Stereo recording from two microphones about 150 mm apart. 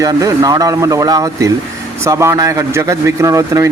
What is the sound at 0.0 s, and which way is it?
Speech, 20° right (ahead or behind).